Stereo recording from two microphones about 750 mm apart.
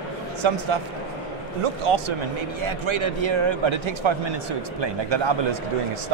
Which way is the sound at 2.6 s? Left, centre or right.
Right.